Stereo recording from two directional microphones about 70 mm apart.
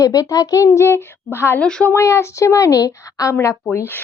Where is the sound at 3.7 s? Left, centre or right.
Left.